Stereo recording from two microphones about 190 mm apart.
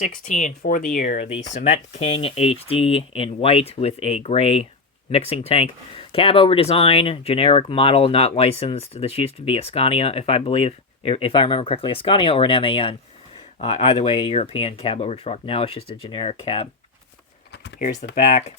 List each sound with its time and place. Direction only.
0.0 s speech: 40° left (ahead or behind)
18.1 s speech: 35° left (ahead or behind)